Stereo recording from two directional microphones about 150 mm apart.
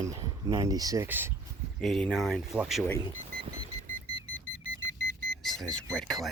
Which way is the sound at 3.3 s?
80° right.